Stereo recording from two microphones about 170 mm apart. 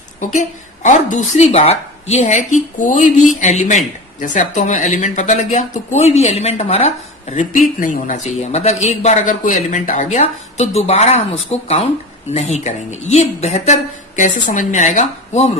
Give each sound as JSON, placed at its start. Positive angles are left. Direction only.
{"t": 0.2, "sound": "a woman's voice", "side_deg": 45}